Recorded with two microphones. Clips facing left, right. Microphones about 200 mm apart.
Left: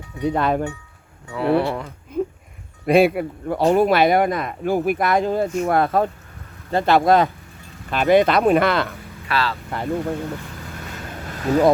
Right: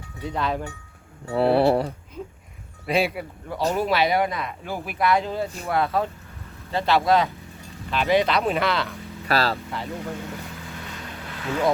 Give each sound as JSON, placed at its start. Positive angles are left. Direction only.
{"t": 0.2, "sound": "speech", "side_deg": 55}
{"t": 1.3, "sound": "speech", "side_deg": -35}
{"t": 2.8, "sound": "speech", "side_deg": 55}
{"t": 9.2, "sound": "speech", "side_deg": -40}
{"t": 9.6, "sound": "speech", "side_deg": 50}
{"t": 11.3, "sound": "vehicle", "side_deg": 40}